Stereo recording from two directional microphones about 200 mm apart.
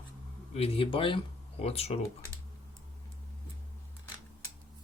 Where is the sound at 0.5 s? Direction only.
30° left (ahead or behind).